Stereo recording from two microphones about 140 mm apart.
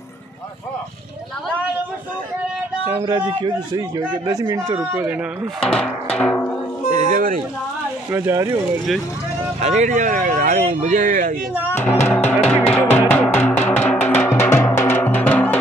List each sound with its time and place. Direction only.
3.1 s speech: 30° right (ahead or behind)
4.9 s speech: 10° right (ahead or behind)
5.6 s speech: 5° left (ahead or behind)
6.1 s music: 10° left (ahead or behind)
7.0 s speech: 75° right (ahead or behind)
8.1 s speech: 20° right (ahead or behind)
9.6 s speech: 55° right (ahead or behind)
11.7 s music: 15° left (ahead or behind)